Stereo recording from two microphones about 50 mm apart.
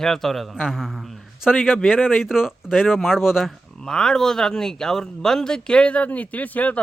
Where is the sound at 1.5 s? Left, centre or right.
Left.